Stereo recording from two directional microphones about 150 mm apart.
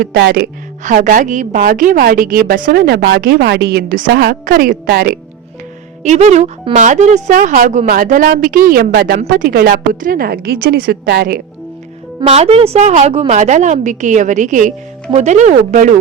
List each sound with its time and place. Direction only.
0.0 s speech: 90° right
0.9 s a woman's voice: 65° right (ahead or behind); by 5.1 s 85° right
6.0 s a woman's voice: 50° right (ahead or behind)
7.3 s a woman's voice: 65° right (ahead or behind); by 11.4 s 90° right
12.2 s a woman's voice: 45° right (ahead or behind)